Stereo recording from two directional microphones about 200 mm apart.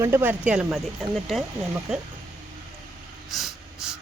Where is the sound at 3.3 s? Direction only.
Centre (ahead or behind).